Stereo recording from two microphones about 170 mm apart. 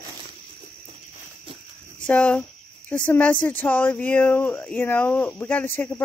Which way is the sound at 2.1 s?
5° left (ahead or behind).